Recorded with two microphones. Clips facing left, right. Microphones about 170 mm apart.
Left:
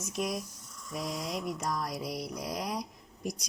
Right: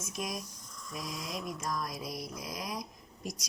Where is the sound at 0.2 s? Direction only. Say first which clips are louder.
Left 5 dB; 60° left (ahead or behind).